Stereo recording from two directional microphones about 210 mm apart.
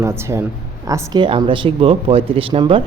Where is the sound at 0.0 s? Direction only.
10° right (ahead or behind).